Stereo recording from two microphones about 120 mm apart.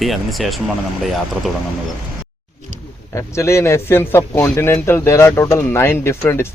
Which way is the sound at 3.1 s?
25° left (ahead or behind).